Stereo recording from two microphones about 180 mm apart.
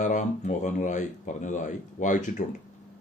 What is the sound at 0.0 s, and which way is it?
Speech, 45° left (ahead or behind).